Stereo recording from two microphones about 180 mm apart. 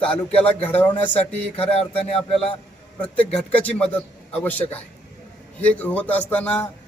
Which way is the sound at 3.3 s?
5° left (ahead or behind).